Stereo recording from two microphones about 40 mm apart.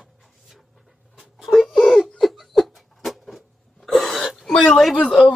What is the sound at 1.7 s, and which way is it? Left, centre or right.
Whimper, centre.